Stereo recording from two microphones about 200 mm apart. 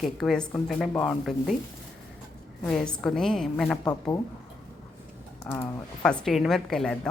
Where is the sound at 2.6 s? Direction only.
5° left (ahead or behind).